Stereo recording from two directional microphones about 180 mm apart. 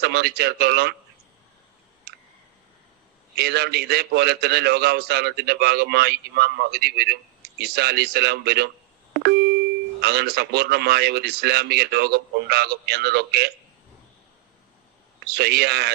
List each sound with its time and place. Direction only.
0.0 s a man's voice: 65° right (ahead or behind)
2.1 s clicking: 60° right (ahead or behind)
3.3 s a man's voice: 65° right (ahead or behind)
10.0 s a man's voice: 65° right (ahead or behind)
15.3 s a man's voice: 65° right (ahead or behind)